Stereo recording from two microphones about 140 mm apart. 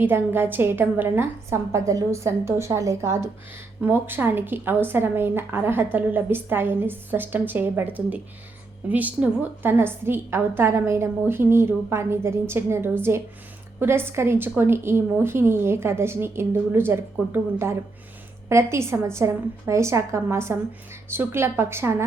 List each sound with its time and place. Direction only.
0.0 s a woman's voice: 15° right (ahead or behind)